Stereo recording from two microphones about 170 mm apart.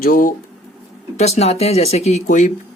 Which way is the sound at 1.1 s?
40° left (ahead or behind).